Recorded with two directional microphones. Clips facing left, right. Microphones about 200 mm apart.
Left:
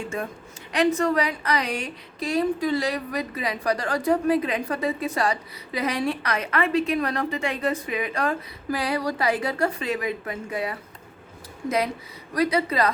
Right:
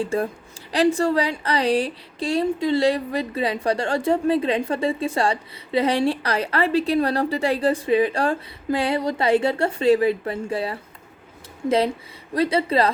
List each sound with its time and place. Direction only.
0.0 s a woman's voice: 35° right (ahead or behind)
12.3 s a woman's voice: 30° right (ahead or behind)